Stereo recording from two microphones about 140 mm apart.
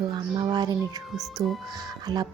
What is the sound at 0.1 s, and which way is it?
Speech, 30° right (ahead or behind).